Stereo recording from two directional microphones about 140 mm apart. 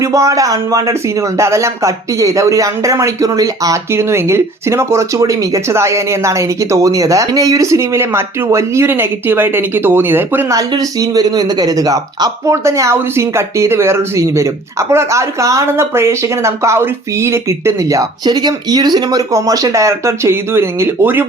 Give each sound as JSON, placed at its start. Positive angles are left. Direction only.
{"t": 0.0, "sound": "speech", "side_deg": -25}